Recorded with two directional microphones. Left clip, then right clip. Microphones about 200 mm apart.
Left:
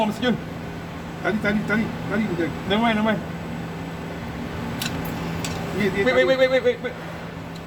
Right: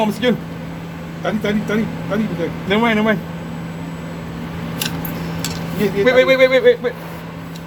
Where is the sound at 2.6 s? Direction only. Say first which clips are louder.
Right 6 dB; 30° right (ahead or behind).